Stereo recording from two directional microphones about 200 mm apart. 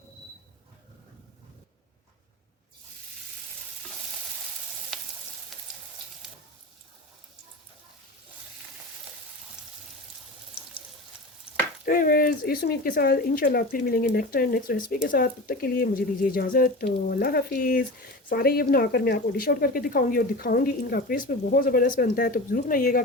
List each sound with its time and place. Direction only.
4.9 s frying: centre (ahead or behind)
11.5 s frying: 5° right (ahead or behind)
11.9 s speech: 45° left (ahead or behind)